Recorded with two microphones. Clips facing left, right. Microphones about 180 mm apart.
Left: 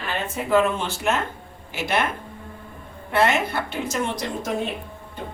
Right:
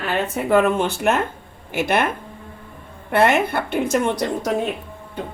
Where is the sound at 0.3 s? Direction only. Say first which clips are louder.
Right 3 dB; 55° right (ahead or behind).